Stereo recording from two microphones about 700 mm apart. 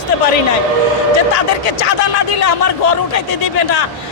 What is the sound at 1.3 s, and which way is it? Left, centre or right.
Speech, left.